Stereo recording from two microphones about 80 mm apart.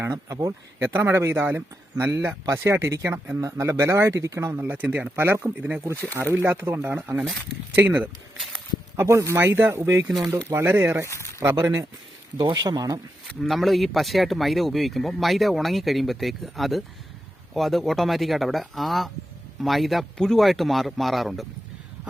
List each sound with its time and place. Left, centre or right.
0.0 s speech: right
9.0 s speech: right
10.1 s speech: centre
10.5 s speech: right
11.0 s speech: left
11.3 s speech: right
12.4 s speech: right
13.4 s speech: centre